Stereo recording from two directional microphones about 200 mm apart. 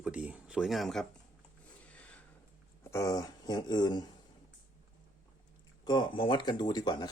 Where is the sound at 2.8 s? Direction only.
15° left (ahead or behind).